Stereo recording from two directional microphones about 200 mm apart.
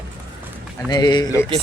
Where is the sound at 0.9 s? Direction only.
20° left (ahead or behind).